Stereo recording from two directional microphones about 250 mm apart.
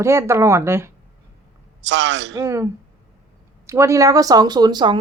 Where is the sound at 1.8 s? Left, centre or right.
Right.